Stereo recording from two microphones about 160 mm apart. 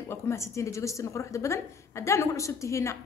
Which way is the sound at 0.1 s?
15° left (ahead or behind).